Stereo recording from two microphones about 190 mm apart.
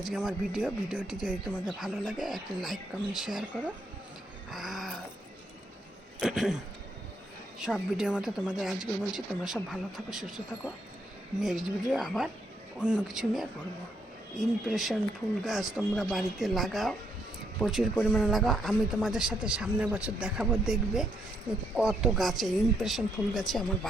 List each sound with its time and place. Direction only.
0.1 s speech: centre (ahead or behind)
4.5 s a sound: centre (ahead or behind)
6.1 s speech: centre (ahead or behind)
7.6 s speech: 5° right (ahead or behind)